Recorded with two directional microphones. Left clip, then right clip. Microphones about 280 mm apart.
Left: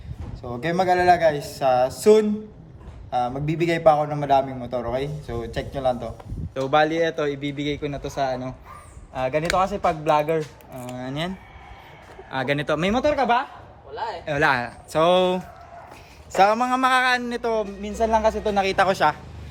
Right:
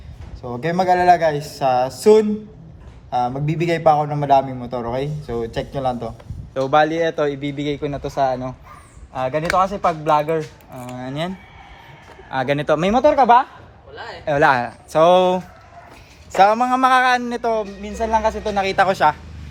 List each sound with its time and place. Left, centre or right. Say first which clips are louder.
0.4 s a man's voice: right 3 dB; centre
12.3 s a man's voice: right 5 dB; centre
13.9 s speech: left 4 dB; centre
14.3 s a man's voice: right 6 dB; centre